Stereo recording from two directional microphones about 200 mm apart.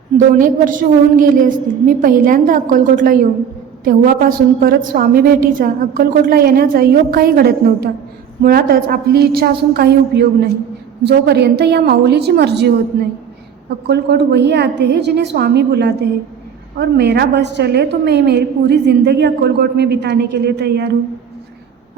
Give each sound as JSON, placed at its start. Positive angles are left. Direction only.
{"t": 0.3, "sound": "a woman's voice", "side_deg": -40}
{"t": 13.8, "sound": "a woman's voice", "side_deg": -55}